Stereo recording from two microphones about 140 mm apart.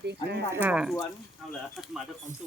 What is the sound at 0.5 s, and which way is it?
Speech, 10° right (ahead or behind).